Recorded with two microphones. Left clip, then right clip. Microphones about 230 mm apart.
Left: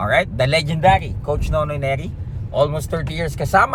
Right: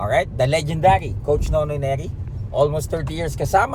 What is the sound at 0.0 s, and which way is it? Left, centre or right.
Speech, centre.